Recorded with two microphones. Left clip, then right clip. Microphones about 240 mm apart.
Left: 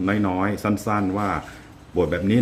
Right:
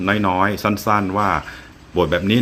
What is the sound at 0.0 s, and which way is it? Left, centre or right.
Speech, centre.